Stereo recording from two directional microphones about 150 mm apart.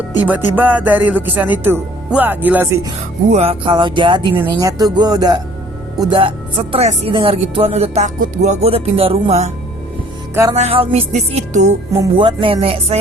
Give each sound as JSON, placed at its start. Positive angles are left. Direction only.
{"t": 0.2, "sound": "speech", "side_deg": -10}
{"t": 3.3, "sound": "speech", "side_deg": -40}
{"t": 10.5, "sound": "speech", "side_deg": -45}
{"t": 12.1, "sound": "speech", "side_deg": -35}